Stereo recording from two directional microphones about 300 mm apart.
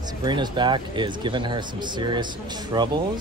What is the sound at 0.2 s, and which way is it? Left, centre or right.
Speech, centre.